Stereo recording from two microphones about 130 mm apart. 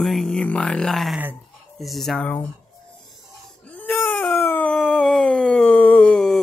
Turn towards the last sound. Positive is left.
turn(degrees=5)  # may be behind; listen again after turning